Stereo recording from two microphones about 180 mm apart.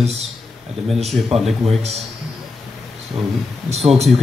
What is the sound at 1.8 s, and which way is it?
Speech, 35° right (ahead or behind).